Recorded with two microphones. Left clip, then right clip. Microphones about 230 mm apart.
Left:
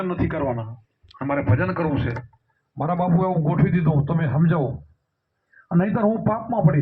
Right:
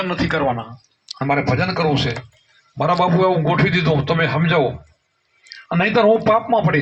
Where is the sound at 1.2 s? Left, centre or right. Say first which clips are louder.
Right 5 dB; right.